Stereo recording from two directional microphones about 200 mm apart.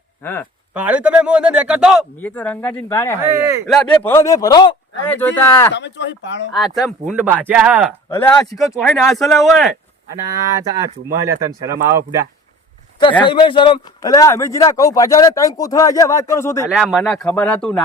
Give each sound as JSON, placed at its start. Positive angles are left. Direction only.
{"t": 0.2, "sound": "speech", "side_deg": 10}
{"t": 0.7, "sound": "a man's voice", "side_deg": -5}
{"t": 2.1, "sound": "speech", "side_deg": 10}
{"t": 3.2, "sound": "speech", "side_deg": -15}
{"t": 3.7, "sound": "speech", "side_deg": 10}
{"t": 5.7, "sound": "speech", "side_deg": 60}
{"t": 6.5, "sound": "a man's voice", "side_deg": 0}
{"t": 8.1, "sound": "speech", "side_deg": 10}
{"t": 8.5, "sound": "a man's voice", "side_deg": 0}
{"t": 10.2, "sound": "speech", "side_deg": -15}
{"t": 13.2, "sound": "speech", "side_deg": 25}
{"t": 16.6, "sound": "a man's voice", "side_deg": -5}